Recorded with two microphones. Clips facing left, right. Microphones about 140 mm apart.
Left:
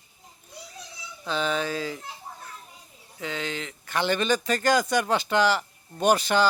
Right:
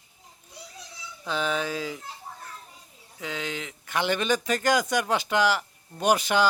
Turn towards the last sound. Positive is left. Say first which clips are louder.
# left 1 dB
turn(degrees=-15)  # may be behind; listen again after turning